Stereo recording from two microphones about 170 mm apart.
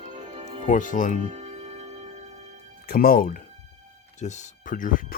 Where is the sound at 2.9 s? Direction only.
60° left (ahead or behind).